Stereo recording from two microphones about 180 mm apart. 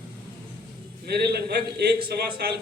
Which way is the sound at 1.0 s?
60° right (ahead or behind).